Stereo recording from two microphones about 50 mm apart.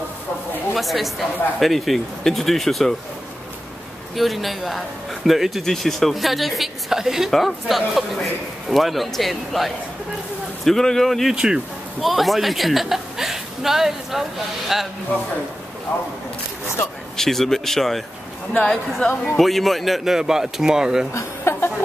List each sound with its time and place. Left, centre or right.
0.7 s a man's voice: centre
4.1 s a man's voice: centre
11.3 s speech: centre
12.0 s a man's voice: centre
17.2 s speech: centre
19.3 s a man's voice: centre
20.2 s speech: centre
21.1 s a sound: left